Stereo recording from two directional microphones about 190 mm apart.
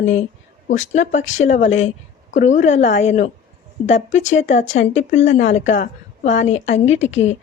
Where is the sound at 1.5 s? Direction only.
40° left (ahead or behind).